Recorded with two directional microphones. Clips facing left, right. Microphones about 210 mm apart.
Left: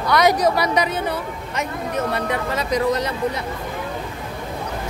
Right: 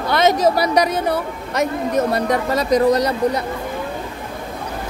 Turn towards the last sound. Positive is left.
turn(degrees=-40)  # may be behind; listen again after turning